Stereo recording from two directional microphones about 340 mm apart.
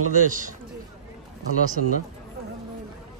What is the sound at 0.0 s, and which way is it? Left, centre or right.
Speech, right.